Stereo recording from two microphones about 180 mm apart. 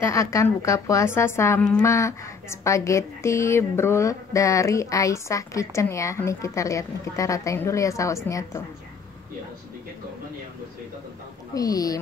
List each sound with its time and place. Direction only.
0.0 s a woman's voice: 15° left (ahead or behind)
11.5 s speech: 20° left (ahead or behind)